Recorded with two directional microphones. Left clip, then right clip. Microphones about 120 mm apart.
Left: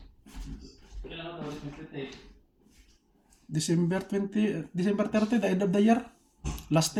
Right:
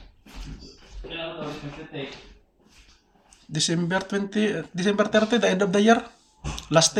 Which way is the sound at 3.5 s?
20° left (ahead or behind).